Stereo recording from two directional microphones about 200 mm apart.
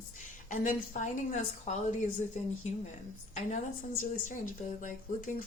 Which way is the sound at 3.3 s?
35° left (ahead or behind).